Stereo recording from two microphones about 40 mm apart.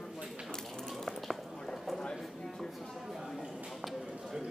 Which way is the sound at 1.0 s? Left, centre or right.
Centre.